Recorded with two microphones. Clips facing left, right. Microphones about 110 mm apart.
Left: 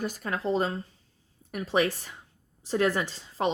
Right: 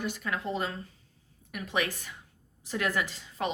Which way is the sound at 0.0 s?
40° left (ahead or behind).